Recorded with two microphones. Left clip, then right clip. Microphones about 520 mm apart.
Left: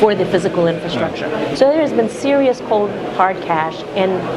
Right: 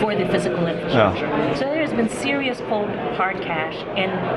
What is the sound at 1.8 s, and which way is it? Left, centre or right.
A woman's voice, left.